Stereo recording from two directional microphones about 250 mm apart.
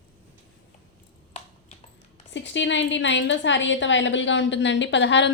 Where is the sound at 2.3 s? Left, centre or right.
Left.